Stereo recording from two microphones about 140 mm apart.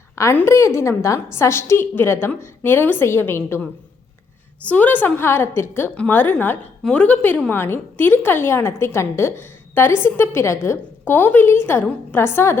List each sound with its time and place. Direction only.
0.2 s a woman's voice: 20° left (ahead or behind)